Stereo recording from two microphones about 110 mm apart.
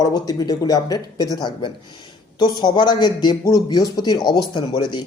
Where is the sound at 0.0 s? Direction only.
35° left (ahead or behind).